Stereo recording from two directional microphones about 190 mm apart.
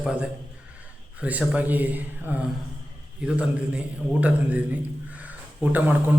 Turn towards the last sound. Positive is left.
turn(degrees=-10)  # may be behind; listen again after turning